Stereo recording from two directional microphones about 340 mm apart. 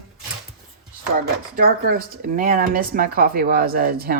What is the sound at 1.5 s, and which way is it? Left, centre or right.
A woman's voice, right.